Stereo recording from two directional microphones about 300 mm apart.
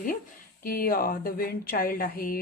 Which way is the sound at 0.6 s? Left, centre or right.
Left.